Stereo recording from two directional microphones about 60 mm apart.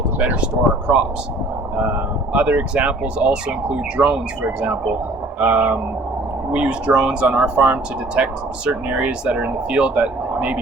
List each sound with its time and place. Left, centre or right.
0.2 s speech: right
2.3 s speech: right
5.4 s speech: right